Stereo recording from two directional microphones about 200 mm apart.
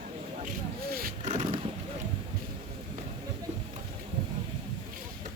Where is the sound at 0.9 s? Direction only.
40° right (ahead or behind).